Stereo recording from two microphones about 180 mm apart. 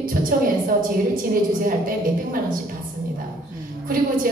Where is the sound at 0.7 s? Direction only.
50° right (ahead or behind).